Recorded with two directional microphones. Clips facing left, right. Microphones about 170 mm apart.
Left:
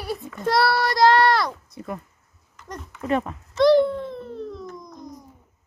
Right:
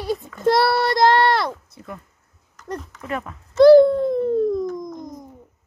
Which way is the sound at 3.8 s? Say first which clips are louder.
Right 9 dB; 40° right (ahead or behind).